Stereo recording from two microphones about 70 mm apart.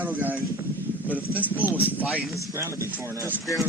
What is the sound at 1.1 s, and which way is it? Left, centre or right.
Speech, left.